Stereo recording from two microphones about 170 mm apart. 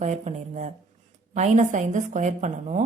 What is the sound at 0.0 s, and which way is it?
A woman's voice, 45° right (ahead or behind).